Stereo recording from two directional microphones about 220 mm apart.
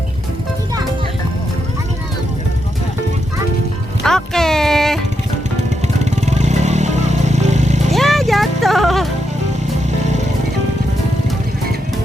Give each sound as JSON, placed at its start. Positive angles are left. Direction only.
{"t": 4.0, "sound": "music", "side_deg": 0}
{"t": 6.1, "sound": "vehicle", "side_deg": -30}
{"t": 7.9, "sound": "music", "side_deg": 0}
{"t": 10.0, "sound": "music", "side_deg": -30}